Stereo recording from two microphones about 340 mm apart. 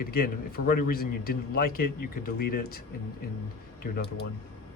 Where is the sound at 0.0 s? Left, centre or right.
Left.